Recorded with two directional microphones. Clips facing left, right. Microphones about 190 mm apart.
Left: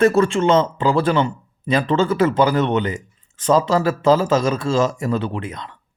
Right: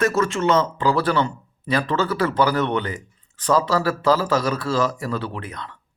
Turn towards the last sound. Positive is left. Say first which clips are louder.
# left 5 dB
turn(degrees=20)  # may be behind; listen again after turning